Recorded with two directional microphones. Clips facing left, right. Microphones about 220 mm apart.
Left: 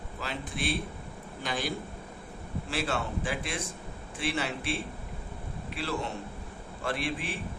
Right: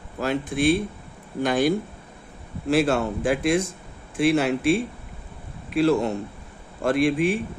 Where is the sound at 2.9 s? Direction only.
45° right (ahead or behind).